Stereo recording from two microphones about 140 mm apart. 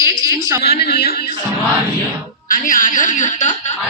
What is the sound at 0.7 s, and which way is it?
Speech, 90° left.